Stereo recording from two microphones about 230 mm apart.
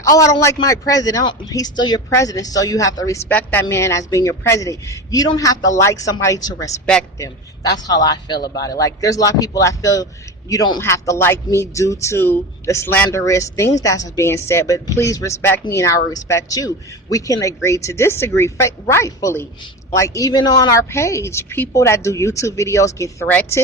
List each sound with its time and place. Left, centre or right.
0.0 s speech: centre